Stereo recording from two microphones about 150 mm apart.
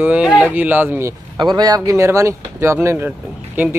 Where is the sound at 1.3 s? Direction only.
30° right (ahead or behind).